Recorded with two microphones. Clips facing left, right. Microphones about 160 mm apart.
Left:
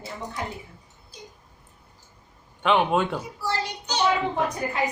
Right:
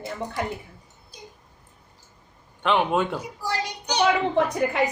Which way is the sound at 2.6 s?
Centre (ahead or behind).